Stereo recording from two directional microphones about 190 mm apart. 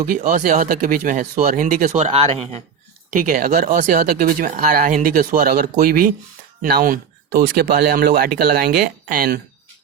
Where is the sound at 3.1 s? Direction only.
50° right (ahead or behind).